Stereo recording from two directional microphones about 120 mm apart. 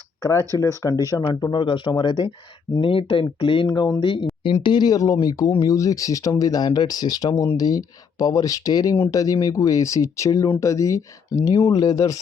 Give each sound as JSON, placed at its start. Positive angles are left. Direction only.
{"t": 0.2, "sound": "speech", "side_deg": 25}
{"t": 1.1, "sound": "speech", "side_deg": 35}